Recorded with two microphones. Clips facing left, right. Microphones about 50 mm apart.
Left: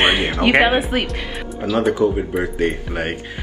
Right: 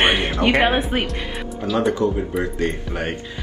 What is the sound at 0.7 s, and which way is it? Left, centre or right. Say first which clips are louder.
Speech: left 2 dB; centre.